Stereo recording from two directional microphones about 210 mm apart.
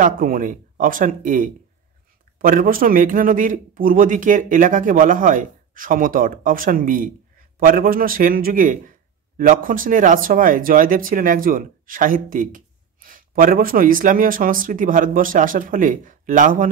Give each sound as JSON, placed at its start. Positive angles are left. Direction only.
{"t": 0.0, "sound": "speech", "side_deg": -40}